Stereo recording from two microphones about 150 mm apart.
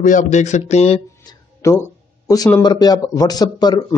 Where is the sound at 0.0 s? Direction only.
55° left (ahead or behind).